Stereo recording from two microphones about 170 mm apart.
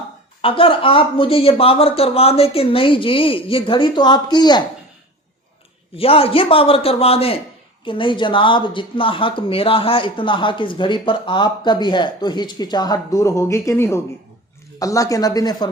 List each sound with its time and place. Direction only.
0.4 s speech: 30° left (ahead or behind)
6.0 s speech: 35° left (ahead or behind)